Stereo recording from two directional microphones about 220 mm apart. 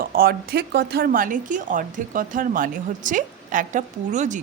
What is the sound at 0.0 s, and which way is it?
Speech, 40° right (ahead or behind).